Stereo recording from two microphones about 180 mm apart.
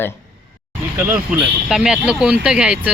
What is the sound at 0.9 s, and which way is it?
Speech, 10° right (ahead or behind).